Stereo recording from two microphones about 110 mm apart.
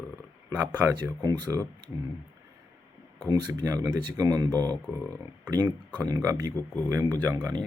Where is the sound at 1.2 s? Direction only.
35° right (ahead or behind).